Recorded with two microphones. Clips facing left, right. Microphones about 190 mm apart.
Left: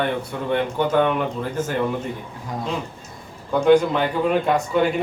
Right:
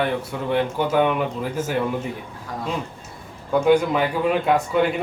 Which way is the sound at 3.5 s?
5° right (ahead or behind).